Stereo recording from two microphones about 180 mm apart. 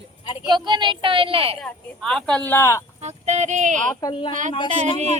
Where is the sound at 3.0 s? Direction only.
40° right (ahead or behind).